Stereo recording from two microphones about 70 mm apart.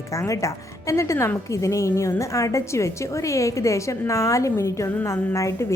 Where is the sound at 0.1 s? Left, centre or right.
Left.